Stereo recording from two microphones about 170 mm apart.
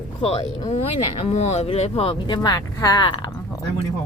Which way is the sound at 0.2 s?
35° left (ahead or behind).